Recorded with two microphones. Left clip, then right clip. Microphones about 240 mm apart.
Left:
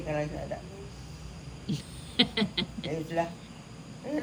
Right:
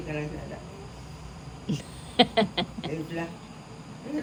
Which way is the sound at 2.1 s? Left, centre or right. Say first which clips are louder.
Right 5 dB; centre.